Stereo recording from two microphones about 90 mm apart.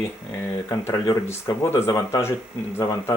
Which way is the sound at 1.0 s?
40° left (ahead or behind).